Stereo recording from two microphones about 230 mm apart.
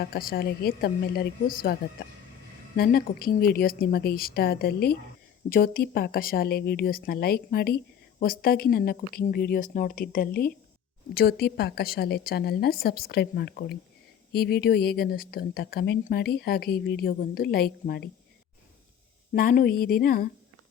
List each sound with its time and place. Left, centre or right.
0.0 s a woman's voice: left
19.3 s speech: left